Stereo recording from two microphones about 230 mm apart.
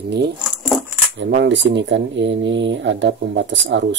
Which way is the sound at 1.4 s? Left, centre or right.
Right.